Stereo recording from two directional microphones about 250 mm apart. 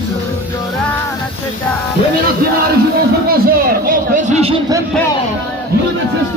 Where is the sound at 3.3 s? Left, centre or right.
Right.